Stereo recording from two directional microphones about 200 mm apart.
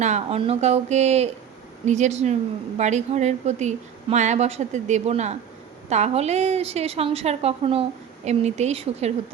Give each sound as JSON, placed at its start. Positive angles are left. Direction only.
{"t": 0.0, "sound": "a woman's voice", "side_deg": -35}